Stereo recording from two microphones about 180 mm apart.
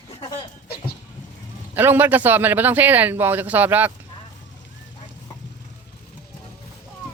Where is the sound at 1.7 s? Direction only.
10° right (ahead or behind).